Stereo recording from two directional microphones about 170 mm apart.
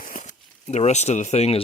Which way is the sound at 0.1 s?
45° left (ahead or behind).